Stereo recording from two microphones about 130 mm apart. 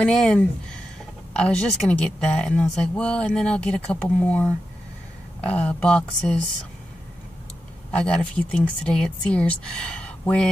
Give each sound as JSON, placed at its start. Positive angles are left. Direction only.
{"t": 0.0, "sound": "speech", "side_deg": 5}
{"t": 7.9, "sound": "speech", "side_deg": 5}